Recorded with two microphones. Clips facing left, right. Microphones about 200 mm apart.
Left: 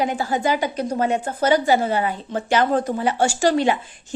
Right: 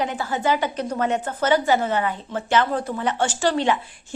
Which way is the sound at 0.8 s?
30° left (ahead or behind).